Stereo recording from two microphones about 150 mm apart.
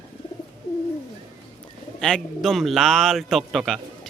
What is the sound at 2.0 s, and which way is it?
Speech, 5° left (ahead or behind).